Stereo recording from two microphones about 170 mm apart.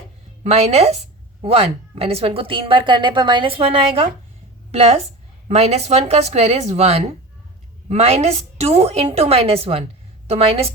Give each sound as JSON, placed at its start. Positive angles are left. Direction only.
{"t": 0.4, "sound": "a woman's voice", "side_deg": -40}